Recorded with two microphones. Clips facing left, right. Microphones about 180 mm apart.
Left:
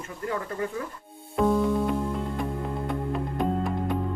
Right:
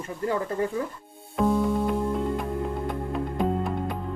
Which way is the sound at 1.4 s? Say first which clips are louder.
Left 1 dB; centre (ahead or behind).